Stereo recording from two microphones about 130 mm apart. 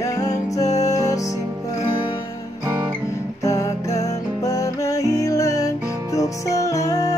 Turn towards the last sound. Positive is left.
turn(degrees=25)  # may be behind; listen again after turning